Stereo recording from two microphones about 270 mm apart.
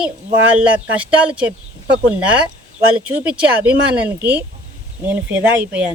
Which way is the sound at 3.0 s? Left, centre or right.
Centre.